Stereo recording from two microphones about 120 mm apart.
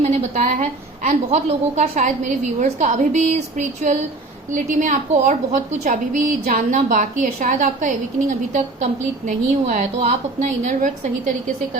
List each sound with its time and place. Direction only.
0.0 s a woman's voice: 80° right